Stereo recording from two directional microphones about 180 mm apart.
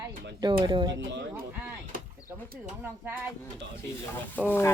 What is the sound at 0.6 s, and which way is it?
Speech, 25° right (ahead or behind).